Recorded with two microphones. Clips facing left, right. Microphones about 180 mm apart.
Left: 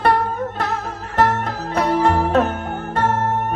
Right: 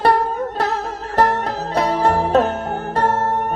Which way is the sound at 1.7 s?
40° right (ahead or behind).